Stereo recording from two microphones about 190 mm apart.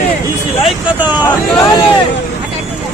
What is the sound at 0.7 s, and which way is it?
Vehicle, 10° right (ahead or behind).